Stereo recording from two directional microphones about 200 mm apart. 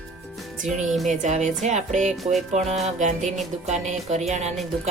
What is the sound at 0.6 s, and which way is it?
Music, centre (ahead or behind).